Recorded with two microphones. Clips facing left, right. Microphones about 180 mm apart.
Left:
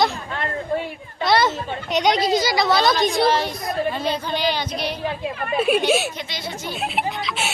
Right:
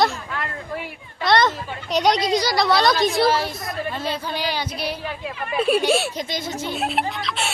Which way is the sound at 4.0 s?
5° right (ahead or behind).